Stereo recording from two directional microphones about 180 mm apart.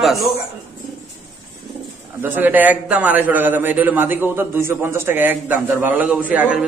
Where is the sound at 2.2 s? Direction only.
10° right (ahead or behind).